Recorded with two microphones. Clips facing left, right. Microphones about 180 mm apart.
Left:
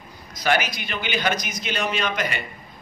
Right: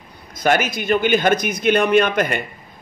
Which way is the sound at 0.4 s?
50° right (ahead or behind).